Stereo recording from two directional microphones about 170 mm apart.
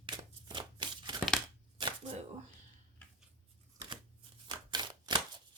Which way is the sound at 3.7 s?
25° right (ahead or behind).